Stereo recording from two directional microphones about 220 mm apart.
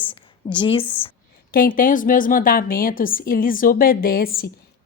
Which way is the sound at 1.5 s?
40° left (ahead or behind).